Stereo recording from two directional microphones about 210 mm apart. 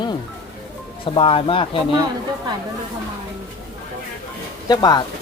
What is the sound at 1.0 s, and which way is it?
Speech, 25° left (ahead or behind).